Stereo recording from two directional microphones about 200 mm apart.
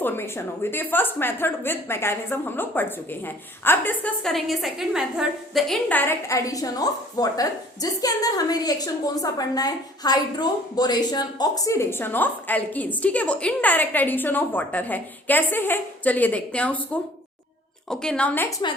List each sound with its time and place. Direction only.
0.0 s a woman's voice: 10° left (ahead or behind)